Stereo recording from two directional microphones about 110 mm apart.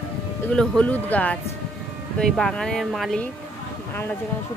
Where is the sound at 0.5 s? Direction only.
10° left (ahead or behind).